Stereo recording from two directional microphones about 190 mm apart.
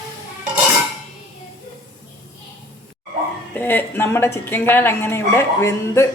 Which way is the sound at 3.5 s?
10° left (ahead or behind).